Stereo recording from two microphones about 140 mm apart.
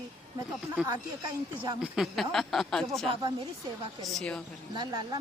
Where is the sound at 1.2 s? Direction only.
30° right (ahead or behind).